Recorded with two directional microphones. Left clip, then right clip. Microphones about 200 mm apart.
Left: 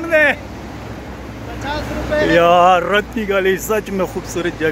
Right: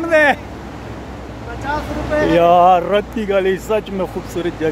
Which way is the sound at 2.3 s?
5° right (ahead or behind).